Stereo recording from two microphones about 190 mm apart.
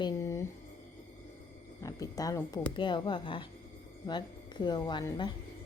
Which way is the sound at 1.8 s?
20° left (ahead or behind).